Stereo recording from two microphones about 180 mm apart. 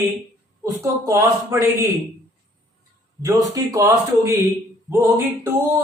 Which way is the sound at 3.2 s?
20° right (ahead or behind).